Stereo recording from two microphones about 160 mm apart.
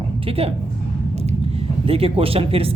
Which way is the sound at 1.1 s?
40° right (ahead or behind).